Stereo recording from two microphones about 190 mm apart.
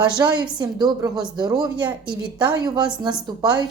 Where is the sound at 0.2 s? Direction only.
20° right (ahead or behind).